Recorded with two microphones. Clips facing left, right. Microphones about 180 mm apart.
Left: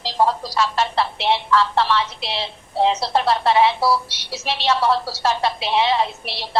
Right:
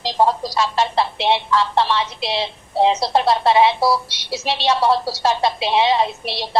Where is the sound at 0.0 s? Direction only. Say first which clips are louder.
Right 2 dB; 20° right (ahead or behind).